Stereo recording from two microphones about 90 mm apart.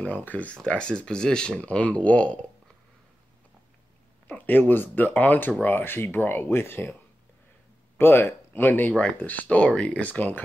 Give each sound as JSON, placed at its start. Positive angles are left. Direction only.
{"t": 0.0, "sound": "speech", "side_deg": 15}
{"t": 4.3, "sound": "speech", "side_deg": 20}
{"t": 8.0, "sound": "speech", "side_deg": 25}